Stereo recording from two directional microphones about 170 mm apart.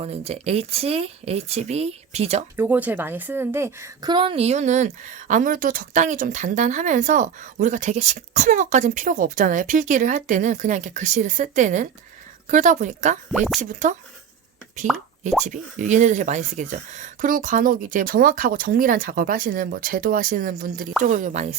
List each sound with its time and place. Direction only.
0.0 s speech: 35° right (ahead or behind)
2.6 s speech: 10° right (ahead or behind)
4.1 s a woman's voice: 30° right (ahead or behind); by 13.9 s 45° right (ahead or behind)
15.4 s a woman's voice: 45° right (ahead or behind)